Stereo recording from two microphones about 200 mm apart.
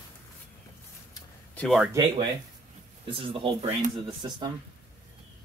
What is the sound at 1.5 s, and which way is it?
Speech, centre (ahead or behind).